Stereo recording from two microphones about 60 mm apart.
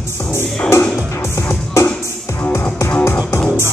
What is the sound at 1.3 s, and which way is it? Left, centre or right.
Music, left.